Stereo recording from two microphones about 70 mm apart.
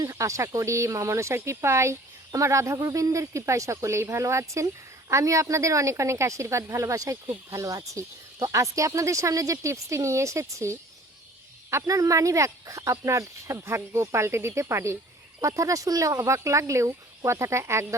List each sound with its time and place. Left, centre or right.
0.0 s a woman's voice: right
15.4 s a woman's voice: right